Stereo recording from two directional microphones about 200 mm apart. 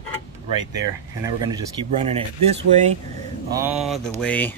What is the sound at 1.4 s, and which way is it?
Speech, 20° right (ahead or behind).